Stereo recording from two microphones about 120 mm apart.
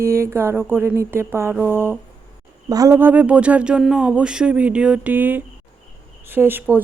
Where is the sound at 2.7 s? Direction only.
30° right (ahead or behind).